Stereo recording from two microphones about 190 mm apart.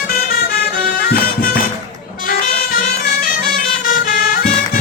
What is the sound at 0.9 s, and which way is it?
Music, 55° left (ahead or behind).